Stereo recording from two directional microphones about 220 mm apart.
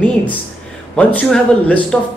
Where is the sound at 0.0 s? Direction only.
5° left (ahead or behind).